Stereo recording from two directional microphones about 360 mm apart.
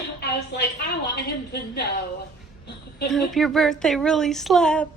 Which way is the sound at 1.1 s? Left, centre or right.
Left.